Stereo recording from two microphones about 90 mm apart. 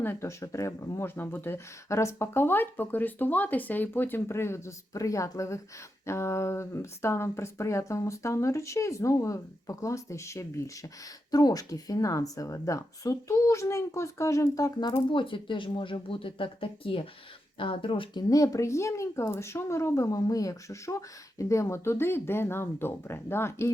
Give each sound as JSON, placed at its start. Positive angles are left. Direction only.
{"t": 0.0, "sound": "speech", "side_deg": 25}
{"t": 11.3, "sound": "speech", "side_deg": 45}
{"t": 15.1, "sound": "speech", "side_deg": 70}
{"t": 18.3, "sound": "speech", "side_deg": 40}